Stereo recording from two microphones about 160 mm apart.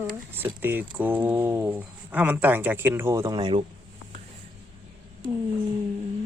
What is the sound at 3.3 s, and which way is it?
Speech, 30° right (ahead or behind).